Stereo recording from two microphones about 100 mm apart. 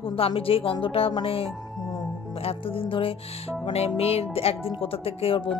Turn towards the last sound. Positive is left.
turn(degrees=75)  # may be behind; listen again after turning